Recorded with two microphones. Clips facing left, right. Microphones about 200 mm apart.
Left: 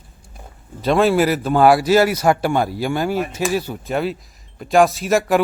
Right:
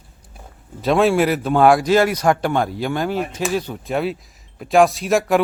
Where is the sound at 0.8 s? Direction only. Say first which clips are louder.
Even; centre (ahead or behind).